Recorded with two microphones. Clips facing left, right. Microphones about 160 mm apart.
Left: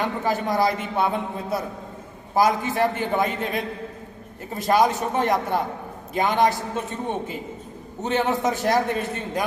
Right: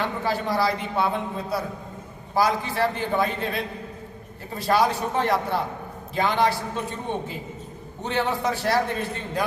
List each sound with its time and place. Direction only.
0.0 s a man's voice: 20° left (ahead or behind)
8.0 s a man's voice: 20° left (ahead or behind)